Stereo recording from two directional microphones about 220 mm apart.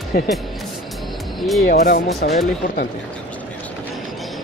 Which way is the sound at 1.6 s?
45° left (ahead or behind).